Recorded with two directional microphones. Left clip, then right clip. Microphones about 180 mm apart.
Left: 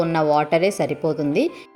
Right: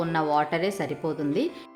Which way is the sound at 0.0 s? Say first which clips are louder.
Left 6 dB; 20° left (ahead or behind).